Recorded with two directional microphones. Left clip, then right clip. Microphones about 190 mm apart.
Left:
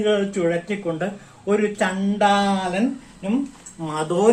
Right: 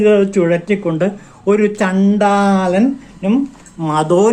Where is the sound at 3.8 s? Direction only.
55° right (ahead or behind).